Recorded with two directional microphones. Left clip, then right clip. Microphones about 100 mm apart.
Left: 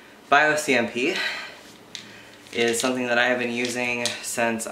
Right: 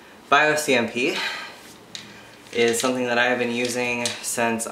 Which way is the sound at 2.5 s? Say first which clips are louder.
Right 2 dB; 10° left (ahead or behind).